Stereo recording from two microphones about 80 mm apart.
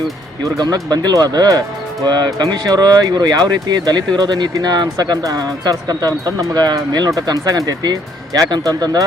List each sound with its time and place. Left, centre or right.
0.4 s speech: right
7.4 s speech: right
8.6 s speech: right